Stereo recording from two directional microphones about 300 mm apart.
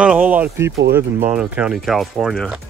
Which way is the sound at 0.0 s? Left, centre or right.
Centre.